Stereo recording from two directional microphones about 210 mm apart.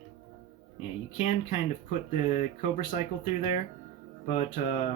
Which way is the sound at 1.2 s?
40° left (ahead or behind).